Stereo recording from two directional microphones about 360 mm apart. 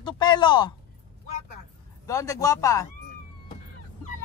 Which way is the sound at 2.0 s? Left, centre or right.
Centre.